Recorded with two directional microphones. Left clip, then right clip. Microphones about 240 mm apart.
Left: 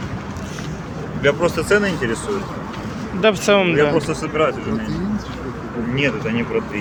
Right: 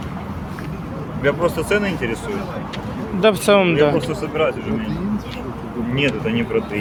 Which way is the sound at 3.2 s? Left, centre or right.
Centre.